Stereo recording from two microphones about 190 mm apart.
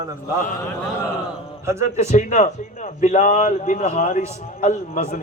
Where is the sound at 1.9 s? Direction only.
40° left (ahead or behind).